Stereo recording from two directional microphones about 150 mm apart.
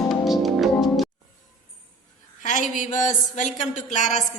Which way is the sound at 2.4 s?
55° left (ahead or behind).